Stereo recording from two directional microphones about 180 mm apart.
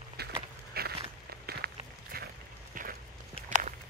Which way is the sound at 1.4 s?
60° right (ahead or behind).